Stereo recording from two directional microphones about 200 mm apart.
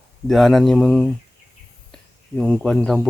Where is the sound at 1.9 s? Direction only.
5° left (ahead or behind).